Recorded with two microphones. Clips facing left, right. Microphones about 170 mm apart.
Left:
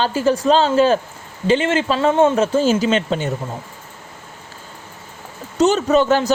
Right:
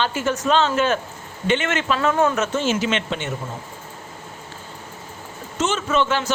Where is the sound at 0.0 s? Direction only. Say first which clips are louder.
Left 5 dB; 35° left (ahead or behind).